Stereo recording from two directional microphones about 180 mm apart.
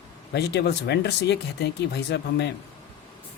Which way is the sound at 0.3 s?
65° left (ahead or behind).